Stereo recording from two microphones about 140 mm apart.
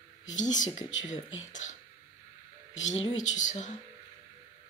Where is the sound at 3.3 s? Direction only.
60° left (ahead or behind).